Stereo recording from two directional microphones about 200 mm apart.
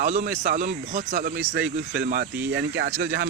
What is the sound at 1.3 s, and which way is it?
Speech, 55° right (ahead or behind).